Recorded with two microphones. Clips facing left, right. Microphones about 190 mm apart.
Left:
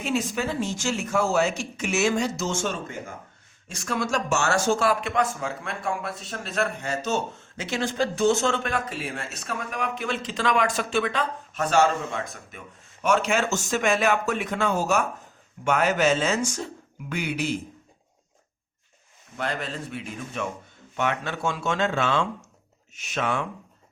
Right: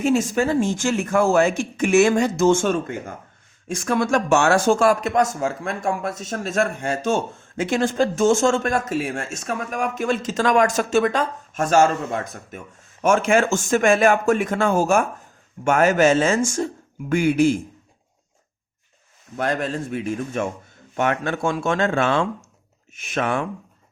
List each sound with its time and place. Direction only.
0.0 s speech: 45° right (ahead or behind)
19.4 s speech: 50° right (ahead or behind)